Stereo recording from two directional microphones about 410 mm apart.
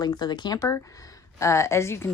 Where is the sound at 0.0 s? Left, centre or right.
Centre.